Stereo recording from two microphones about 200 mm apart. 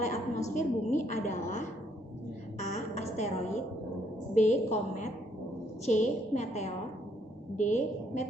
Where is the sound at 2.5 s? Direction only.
35° left (ahead or behind).